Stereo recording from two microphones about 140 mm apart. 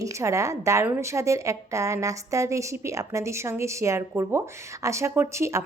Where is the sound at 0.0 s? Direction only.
20° right (ahead or behind).